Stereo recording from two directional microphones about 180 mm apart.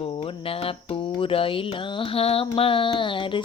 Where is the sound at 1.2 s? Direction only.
30° left (ahead or behind).